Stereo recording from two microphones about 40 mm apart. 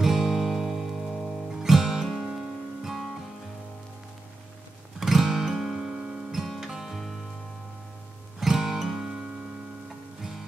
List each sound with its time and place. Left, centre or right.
0.0 s music: centre
5.0 s music: centre
8.4 s music: centre